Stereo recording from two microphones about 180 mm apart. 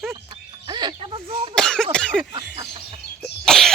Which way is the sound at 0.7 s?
25° right (ahead or behind).